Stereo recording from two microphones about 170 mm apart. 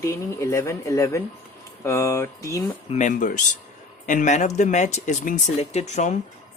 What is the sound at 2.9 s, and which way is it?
Speech, 45° left (ahead or behind).